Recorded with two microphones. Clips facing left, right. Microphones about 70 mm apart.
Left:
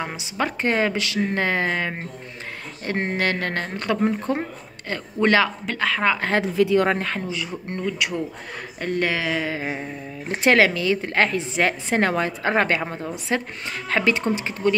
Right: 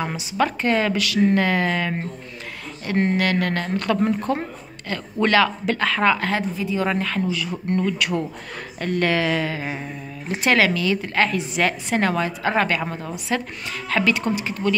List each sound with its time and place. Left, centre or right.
0.0 s speech: left
5.7 s speech: centre
6.4 s speech: left
6.9 s speech: left; by 9.5 s centre
9.5 s a woman's voice: left